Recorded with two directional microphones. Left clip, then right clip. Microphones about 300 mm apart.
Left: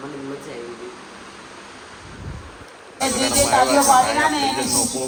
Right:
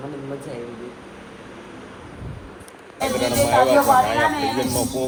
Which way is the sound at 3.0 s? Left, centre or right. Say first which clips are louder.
Left 1 dB; left.